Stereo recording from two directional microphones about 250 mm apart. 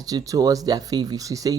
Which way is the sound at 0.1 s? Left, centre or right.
Centre.